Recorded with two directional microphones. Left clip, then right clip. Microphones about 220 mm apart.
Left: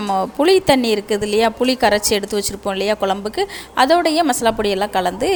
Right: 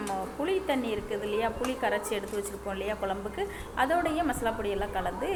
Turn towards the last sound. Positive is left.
turn(degrees=50)  # may be behind; listen again after turning